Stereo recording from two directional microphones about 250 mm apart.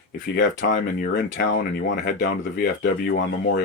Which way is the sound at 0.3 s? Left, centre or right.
Left.